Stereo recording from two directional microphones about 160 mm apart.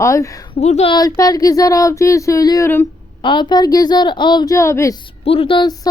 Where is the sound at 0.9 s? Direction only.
25° left (ahead or behind).